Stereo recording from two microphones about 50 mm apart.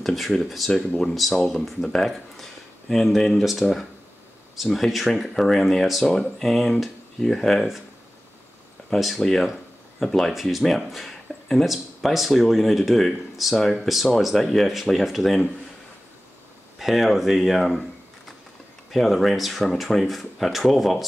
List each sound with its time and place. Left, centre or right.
0.0 s speech: centre
9.2 s speech: centre
16.7 s speech: centre
18.9 s speech: centre